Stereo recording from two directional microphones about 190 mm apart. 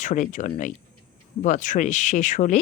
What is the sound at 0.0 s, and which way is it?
Speech, 40° left (ahead or behind).